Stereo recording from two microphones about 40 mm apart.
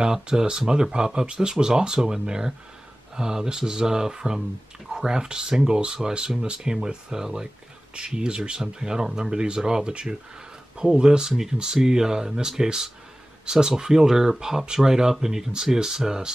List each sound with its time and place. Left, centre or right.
0.0 s speech: centre